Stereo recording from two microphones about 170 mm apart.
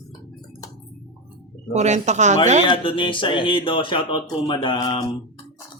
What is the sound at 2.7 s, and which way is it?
Speech, 30° left (ahead or behind).